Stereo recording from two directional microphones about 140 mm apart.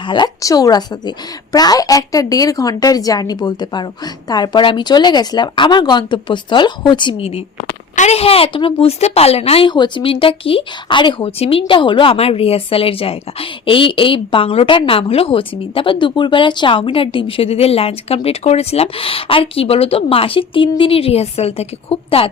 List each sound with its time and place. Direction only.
0.1 s a woman's voice: 30° left (ahead or behind); by 22.3 s 45° left (ahead or behind)